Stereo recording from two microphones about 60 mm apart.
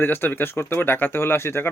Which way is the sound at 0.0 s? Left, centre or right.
Left.